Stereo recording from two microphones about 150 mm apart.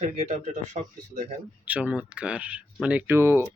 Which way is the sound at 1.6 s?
10° right (ahead or behind).